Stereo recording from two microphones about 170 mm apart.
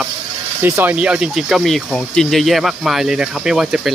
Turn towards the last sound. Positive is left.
turn(degrees=0)  # may be behind; listen again after turning